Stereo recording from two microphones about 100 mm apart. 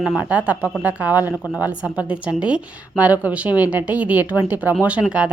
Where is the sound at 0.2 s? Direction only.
15° right (ahead or behind).